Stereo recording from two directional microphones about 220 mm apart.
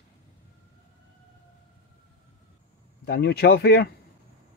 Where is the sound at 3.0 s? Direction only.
50° left (ahead or behind).